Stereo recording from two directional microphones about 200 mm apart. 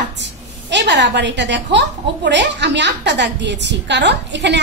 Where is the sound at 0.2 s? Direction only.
60° right (ahead or behind).